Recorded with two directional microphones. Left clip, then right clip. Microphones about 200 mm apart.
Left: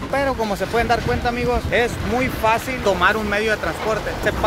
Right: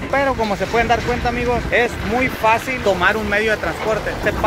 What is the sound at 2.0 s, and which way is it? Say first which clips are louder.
Speech: right 2 dB; 55° left (ahead or behind).